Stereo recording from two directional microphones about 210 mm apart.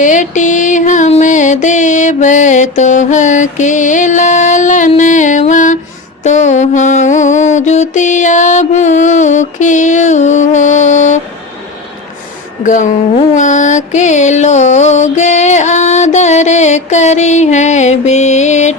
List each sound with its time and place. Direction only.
0.0 s music: 35° left (ahead or behind)
6.2 s mantra: 35° left (ahead or behind)
12.6 s music: 35° left (ahead or behind)